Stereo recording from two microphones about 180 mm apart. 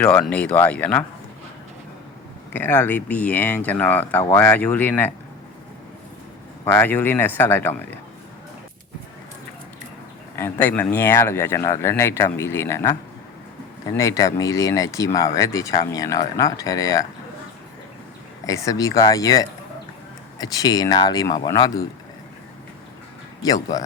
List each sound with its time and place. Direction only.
0.0 s speech: 5° left (ahead or behind)
2.5 s speech: 10° left (ahead or behind)
6.7 s speech: 10° left (ahead or behind)
10.3 s speech: 10° left (ahead or behind)
18.4 s speech: 20° left (ahead or behind)